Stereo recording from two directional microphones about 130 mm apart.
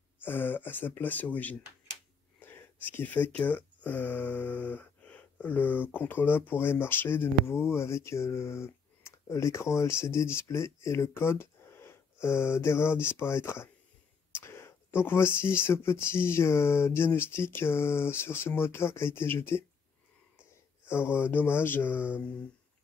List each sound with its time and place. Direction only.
0.2 s speech: 15° left (ahead or behind)
20.8 s speech: 20° left (ahead or behind)